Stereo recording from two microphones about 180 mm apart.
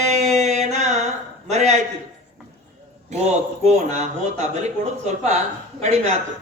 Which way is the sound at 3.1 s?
40° right (ahead or behind).